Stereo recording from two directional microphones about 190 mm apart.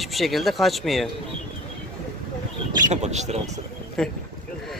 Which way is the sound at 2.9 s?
35° right (ahead or behind).